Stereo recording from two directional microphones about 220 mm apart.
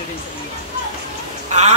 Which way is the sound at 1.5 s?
35° right (ahead or behind).